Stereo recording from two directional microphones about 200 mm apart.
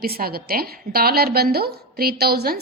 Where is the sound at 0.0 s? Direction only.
50° right (ahead or behind).